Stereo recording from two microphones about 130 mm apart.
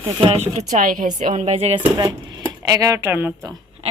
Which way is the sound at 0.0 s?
45° right (ahead or behind).